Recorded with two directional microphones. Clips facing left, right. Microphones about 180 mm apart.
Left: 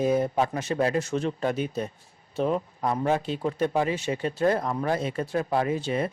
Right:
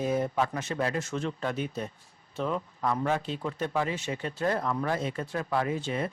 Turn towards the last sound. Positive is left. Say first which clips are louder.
# left 3 dB
turn(degrees=35)  # may be behind; listen again after turning